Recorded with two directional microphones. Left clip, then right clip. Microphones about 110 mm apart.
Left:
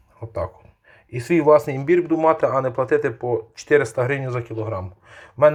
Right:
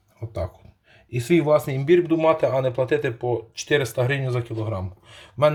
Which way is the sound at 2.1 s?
25° right (ahead or behind).